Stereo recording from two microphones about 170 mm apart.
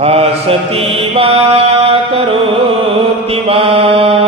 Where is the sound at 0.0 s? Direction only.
35° right (ahead or behind).